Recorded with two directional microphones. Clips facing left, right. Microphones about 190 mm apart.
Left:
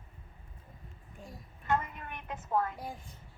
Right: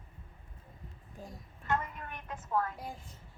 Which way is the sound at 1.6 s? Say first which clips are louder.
Left 2 dB; 20° left (ahead or behind).